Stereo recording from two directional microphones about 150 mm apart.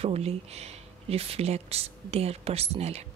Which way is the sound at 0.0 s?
45° right (ahead or behind).